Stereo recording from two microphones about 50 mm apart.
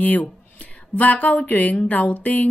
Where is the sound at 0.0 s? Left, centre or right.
Left.